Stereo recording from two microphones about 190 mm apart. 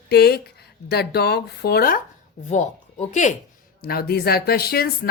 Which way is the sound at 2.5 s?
40° left (ahead or behind).